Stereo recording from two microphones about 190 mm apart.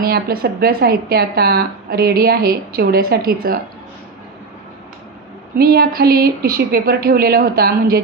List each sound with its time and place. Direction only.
0.0 s a woman's voice: 55° right (ahead or behind)
5.6 s a woman's voice: 55° right (ahead or behind)